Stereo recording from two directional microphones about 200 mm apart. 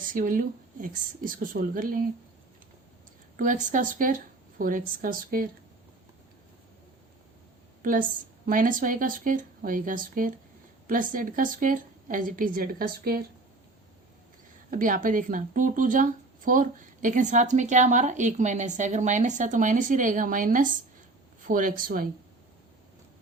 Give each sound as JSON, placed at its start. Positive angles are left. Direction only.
{"t": 0.0, "sound": "a woman's voice", "side_deg": -45}
{"t": 3.3, "sound": "a woman's voice", "side_deg": -40}
{"t": 7.8, "sound": "a woman's voice", "side_deg": -40}
{"t": 14.7, "sound": "a woman's voice", "side_deg": -40}